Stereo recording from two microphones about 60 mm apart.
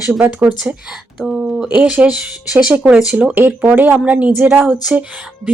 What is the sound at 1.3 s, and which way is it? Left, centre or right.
Speech, centre.